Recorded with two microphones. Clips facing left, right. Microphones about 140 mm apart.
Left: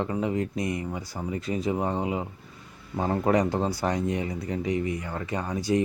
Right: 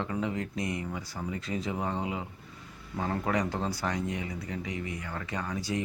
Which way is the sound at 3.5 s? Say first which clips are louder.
Left 6 dB; 20° left (ahead or behind).